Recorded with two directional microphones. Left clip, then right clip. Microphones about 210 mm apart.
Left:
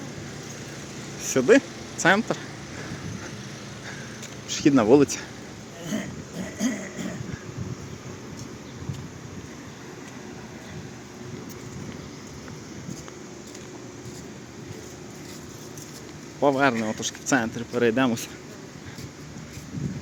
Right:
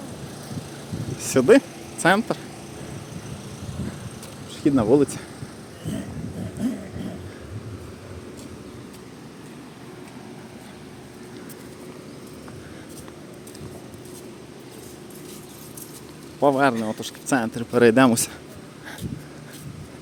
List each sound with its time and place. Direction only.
1.2 s speech: 20° right (ahead or behind)
4.4 s speech: centre (ahead or behind)
5.9 s a sound: 25° left (ahead or behind)
16.4 s speech: 15° right (ahead or behind)